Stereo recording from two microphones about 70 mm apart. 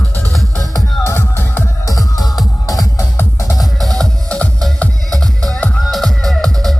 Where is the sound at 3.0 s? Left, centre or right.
Left.